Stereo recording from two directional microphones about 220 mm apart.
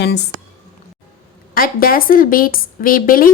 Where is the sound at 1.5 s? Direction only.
40° left (ahead or behind).